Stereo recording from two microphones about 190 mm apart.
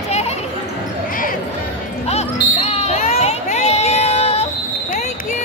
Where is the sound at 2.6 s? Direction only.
35° left (ahead or behind).